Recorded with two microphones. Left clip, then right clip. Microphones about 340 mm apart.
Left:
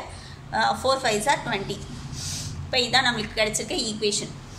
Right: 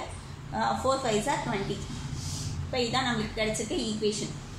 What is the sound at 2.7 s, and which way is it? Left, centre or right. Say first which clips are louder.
Speech: left 7 dB; left.